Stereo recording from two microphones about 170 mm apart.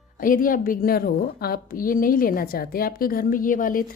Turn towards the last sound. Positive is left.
turn(degrees=55)  # may be behind; listen again after turning